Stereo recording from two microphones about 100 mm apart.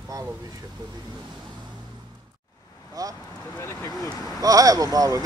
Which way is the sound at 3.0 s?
35° right (ahead or behind).